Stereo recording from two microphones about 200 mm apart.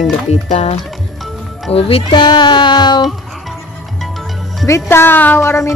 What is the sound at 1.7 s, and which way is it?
Speech, 30° left (ahead or behind).